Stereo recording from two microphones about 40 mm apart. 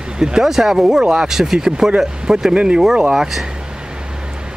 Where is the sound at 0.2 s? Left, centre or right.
Centre.